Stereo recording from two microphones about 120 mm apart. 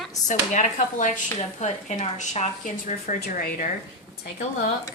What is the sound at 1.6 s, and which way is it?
Speech, 70° left (ahead or behind).